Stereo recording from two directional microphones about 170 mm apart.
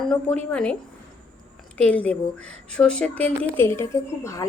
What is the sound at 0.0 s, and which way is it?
Speech, 5° left (ahead or behind).